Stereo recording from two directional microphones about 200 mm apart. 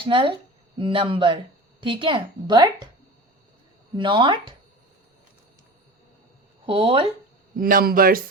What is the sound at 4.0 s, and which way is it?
Speech, 25° right (ahead or behind).